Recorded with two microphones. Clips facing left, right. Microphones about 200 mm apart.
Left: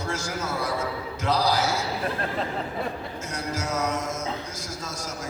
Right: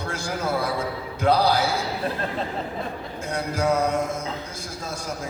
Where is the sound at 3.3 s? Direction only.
55° right (ahead or behind).